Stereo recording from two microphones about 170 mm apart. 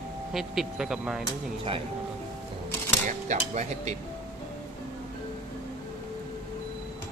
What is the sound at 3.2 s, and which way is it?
Speech, 45° right (ahead or behind).